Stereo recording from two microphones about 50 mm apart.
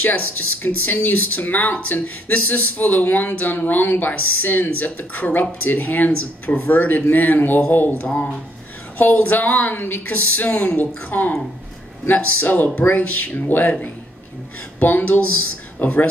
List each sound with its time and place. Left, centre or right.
0.0 s speech: left